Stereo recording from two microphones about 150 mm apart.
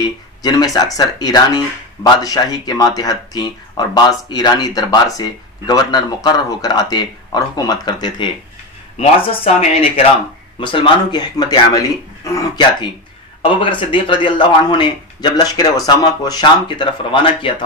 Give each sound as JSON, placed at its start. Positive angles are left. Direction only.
{"t": 0.0, "sound": "speech", "side_deg": 25}
{"t": 8.9, "sound": "speech", "side_deg": 40}